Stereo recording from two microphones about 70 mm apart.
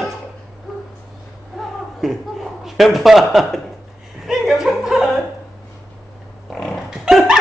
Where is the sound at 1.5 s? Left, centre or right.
Centre.